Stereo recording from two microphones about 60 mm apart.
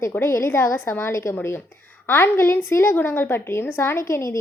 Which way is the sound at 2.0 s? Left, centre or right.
Left.